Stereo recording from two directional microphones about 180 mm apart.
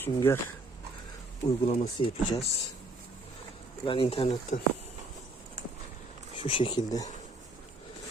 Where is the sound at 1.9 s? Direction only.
30° left (ahead or behind).